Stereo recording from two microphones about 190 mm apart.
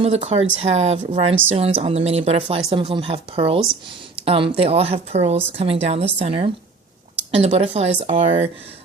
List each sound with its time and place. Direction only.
0.0 s speech: 30° right (ahead or behind)